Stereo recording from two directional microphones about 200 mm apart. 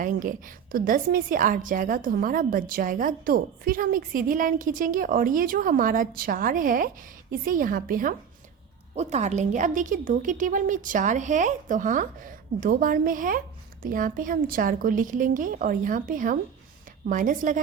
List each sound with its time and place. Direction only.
0.0 s a woman's voice: 40° right (ahead or behind)
9.0 s a woman's voice: 35° right (ahead or behind)